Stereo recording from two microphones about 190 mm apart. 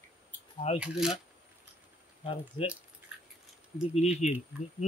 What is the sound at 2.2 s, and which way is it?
Speech, 30° left (ahead or behind).